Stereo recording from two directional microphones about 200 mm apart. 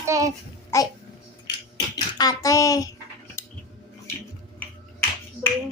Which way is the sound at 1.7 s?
20° left (ahead or behind).